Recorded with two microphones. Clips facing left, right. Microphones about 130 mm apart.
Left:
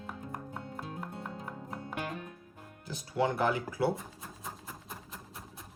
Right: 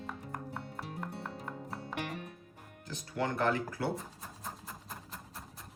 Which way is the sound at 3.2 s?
5° left (ahead or behind).